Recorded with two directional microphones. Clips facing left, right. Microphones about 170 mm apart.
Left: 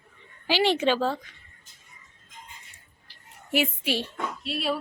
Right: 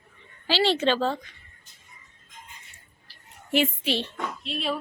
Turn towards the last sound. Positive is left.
turn(degrees=10)  # may be behind; listen again after turning